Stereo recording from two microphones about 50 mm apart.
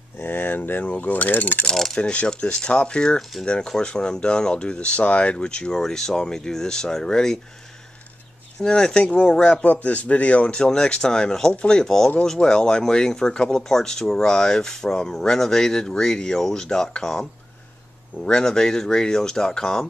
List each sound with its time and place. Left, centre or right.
0.2 s a sound: left
0.8 s coin: left
1.7 s speech: centre
2.0 s speech: left
8.6 s speech: centre
9.6 s speech: left; by 19.9 s centre